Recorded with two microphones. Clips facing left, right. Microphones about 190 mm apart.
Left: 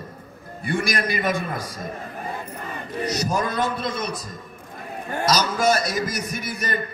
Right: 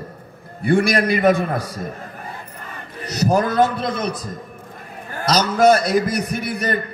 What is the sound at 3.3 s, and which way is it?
Speech, 60° right (ahead or behind).